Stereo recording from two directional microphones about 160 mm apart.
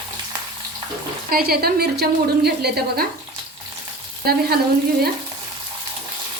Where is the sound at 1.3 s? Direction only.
70° right (ahead or behind).